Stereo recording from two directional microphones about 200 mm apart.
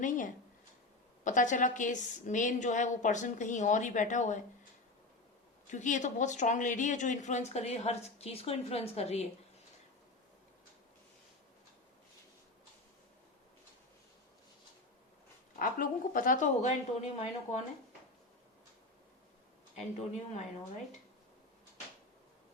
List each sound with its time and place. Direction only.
0.0 s speech: 40° left (ahead or behind)
5.7 s speech: 40° left (ahead or behind)
15.5 s speech: 45° left (ahead or behind)